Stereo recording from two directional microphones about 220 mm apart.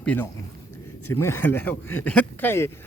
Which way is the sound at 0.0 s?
5° left (ahead or behind).